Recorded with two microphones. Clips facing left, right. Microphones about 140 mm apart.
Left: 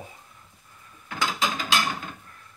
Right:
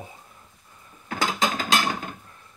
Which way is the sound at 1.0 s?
40° right (ahead or behind).